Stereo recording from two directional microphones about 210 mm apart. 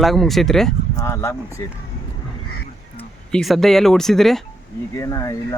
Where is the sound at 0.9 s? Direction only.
15° left (ahead or behind).